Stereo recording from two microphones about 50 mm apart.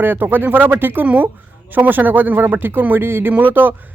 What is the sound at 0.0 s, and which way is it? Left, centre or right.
Speech, right.